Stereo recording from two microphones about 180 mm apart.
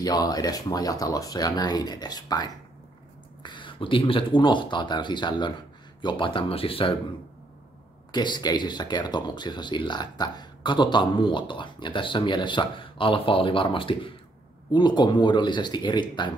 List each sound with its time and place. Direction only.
0.0 s speech: 20° left (ahead or behind)
8.1 s speech: 25° left (ahead or behind)